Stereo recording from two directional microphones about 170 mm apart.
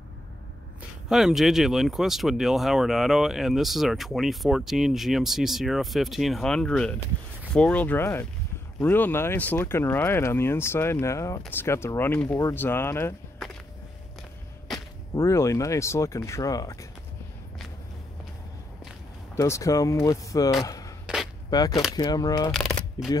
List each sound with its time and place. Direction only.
1.0 s speech: centre (ahead or behind); by 13.1 s 15° left (ahead or behind)
13.4 s a sound: centre (ahead or behind)
15.1 s speech: 15° left (ahead or behind)
19.3 s speech: 15° left (ahead or behind)
20.6 s a sound: 20° left (ahead or behind)
21.5 s speech: 25° left (ahead or behind)
22.5 s shuffling cards: 5° left (ahead or behind)